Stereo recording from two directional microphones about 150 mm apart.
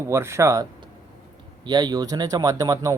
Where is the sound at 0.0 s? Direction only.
20° right (ahead or behind).